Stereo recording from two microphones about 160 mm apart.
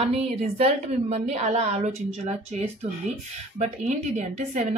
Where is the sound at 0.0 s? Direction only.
40° right (ahead or behind).